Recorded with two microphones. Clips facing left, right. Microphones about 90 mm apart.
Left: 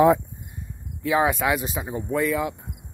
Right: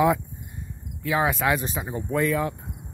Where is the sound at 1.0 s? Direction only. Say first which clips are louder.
Left 2 dB; 20° left (ahead or behind).